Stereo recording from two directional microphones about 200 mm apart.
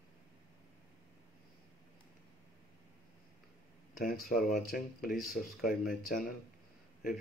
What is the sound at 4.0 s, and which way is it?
Speech, 45° left (ahead or behind).